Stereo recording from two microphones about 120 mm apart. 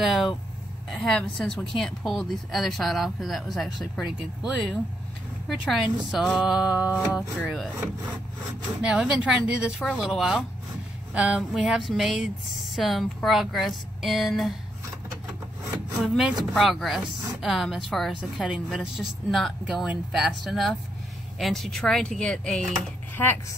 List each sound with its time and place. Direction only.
0.0 s vehicle: centre (ahead or behind)
0.8 s a woman's voice: centre (ahead or behind)
4.1 s a sound: 10° right (ahead or behind)
5.5 s a woman's voice: centre (ahead or behind)
8.8 s a sound: 5° right (ahead or behind)
9.8 s a woman's voice: centre (ahead or behind)
11.1 s a sound: 5° right (ahead or behind)
12.7 s a woman's voice: centre (ahead or behind)
16.0 s a woman's voice: 5° right (ahead or behind)
23.1 s a woman's voice: 15° left (ahead or behind)